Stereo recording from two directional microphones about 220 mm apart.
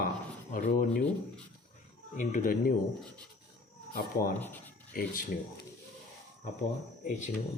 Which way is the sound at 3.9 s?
40° left (ahead or behind).